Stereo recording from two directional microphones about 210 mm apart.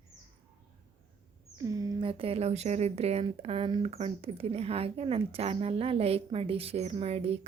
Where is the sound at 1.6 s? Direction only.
15° right (ahead or behind).